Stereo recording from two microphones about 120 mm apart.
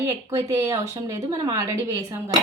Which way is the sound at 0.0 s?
25° right (ahead or behind).